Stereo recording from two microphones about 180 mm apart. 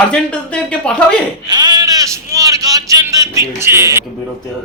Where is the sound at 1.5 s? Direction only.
20° right (ahead or behind).